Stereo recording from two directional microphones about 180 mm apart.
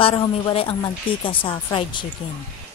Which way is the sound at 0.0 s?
30° left (ahead or behind).